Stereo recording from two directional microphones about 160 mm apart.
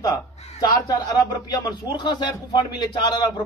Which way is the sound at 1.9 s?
30° left (ahead or behind).